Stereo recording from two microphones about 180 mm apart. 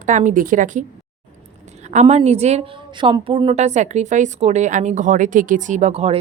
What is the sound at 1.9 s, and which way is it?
A woman's voice, 40° right (ahead or behind).